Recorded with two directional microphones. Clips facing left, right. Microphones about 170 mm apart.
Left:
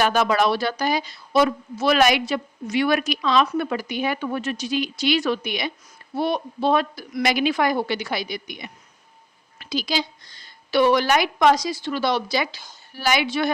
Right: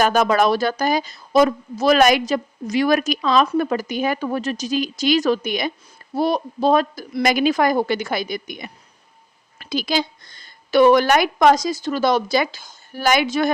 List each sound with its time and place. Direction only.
0.0 s a woman's voice: 45° right (ahead or behind)